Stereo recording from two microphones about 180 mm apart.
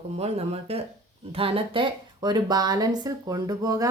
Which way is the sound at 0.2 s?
35° right (ahead or behind).